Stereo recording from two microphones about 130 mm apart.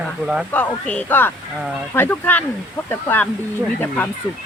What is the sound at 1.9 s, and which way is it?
Speech, 15° left (ahead or behind).